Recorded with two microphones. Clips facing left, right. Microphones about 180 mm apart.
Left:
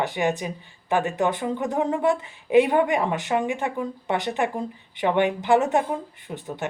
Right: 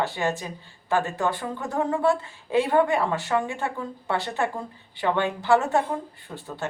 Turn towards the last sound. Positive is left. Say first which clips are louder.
# left 3 dB
turn(degrees=20)  # may be behind; listen again after turning